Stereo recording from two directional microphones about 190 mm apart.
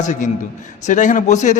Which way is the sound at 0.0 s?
40° left (ahead or behind).